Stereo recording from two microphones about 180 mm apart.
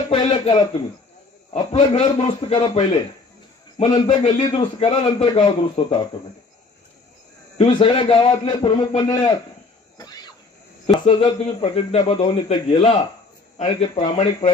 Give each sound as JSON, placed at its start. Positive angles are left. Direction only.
{"t": 0.1, "sound": "a man's voice", "side_deg": 30}
{"t": 4.4, "sound": "a man's voice", "side_deg": 35}
{"t": 7.5, "sound": "a man's voice", "side_deg": 35}
{"t": 9.9, "sound": "a sound", "side_deg": 20}
{"t": 10.9, "sound": "a man's voice", "side_deg": 30}